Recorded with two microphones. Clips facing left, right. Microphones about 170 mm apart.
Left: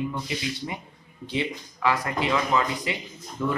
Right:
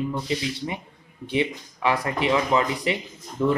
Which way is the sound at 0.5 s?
25° right (ahead or behind).